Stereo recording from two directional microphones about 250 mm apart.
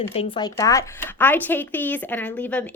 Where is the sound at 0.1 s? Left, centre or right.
Left.